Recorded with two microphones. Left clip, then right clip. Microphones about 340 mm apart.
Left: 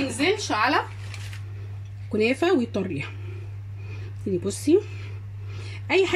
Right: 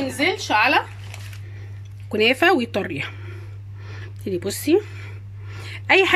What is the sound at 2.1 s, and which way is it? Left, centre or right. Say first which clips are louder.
Speech: right 5 dB; right.